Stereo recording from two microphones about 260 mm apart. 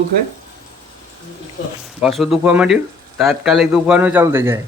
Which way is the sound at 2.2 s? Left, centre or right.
Centre.